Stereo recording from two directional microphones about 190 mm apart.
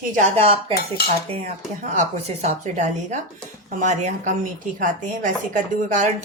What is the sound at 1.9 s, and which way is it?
A woman's voice, 35° right (ahead or behind).